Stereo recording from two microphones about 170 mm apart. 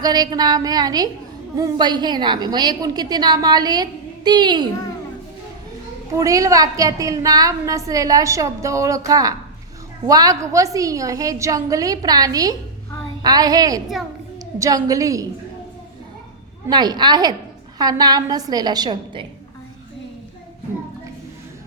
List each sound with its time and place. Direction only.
0.0 s a woman's voice: 25° right (ahead or behind)
6.1 s a woman's voice: 20° right (ahead or behind)
14.8 s a woman's voice: 20° right (ahead or behind)
16.6 s a woman's voice: 25° right (ahead or behind)